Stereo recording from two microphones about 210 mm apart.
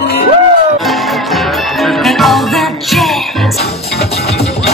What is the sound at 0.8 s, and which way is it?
Music, centre (ahead or behind).